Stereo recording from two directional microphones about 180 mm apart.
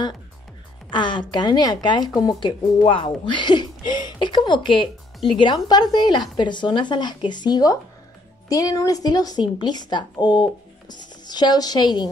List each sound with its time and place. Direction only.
0.8 s a woman's voice: 25° left (ahead or behind)